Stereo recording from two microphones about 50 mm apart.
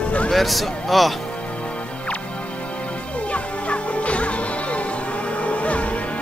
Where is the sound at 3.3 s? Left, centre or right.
Left.